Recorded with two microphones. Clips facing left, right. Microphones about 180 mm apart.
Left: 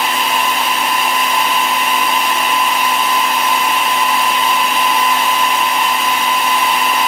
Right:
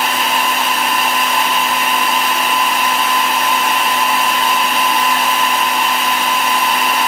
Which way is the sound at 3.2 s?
Centre (ahead or behind).